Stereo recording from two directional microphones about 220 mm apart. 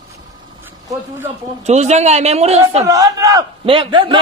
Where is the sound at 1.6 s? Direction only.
30° right (ahead or behind).